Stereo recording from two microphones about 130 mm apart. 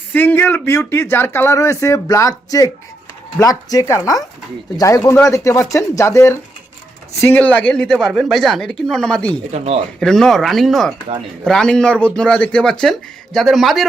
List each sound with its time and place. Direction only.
0.1 s speech: 15° left (ahead or behind)
9.5 s speech: 55° right (ahead or behind)
10.0 s speech: 5° left (ahead or behind)